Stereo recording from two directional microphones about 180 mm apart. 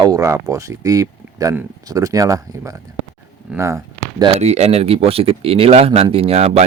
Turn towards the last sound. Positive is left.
turn(degrees=-35)  # may be behind; listen again after turning